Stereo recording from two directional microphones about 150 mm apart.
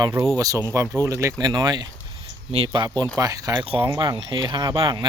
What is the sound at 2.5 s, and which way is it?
Speech, 40° right (ahead or behind).